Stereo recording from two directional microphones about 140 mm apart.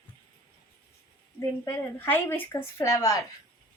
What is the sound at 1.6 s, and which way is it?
A woman's voice, 20° left (ahead or behind).